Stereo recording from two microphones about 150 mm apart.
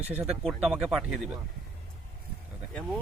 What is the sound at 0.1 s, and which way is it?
Speech, 10° right (ahead or behind).